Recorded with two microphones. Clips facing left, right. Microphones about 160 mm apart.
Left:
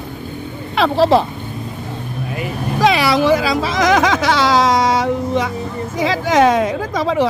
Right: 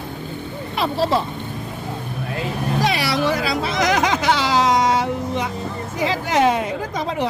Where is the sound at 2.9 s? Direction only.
90° left.